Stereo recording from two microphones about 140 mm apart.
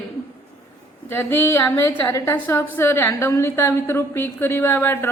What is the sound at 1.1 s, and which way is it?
A woman's voice, 15° left (ahead or behind).